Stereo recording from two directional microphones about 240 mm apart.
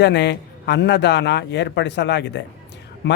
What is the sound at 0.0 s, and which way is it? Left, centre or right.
Speech, left.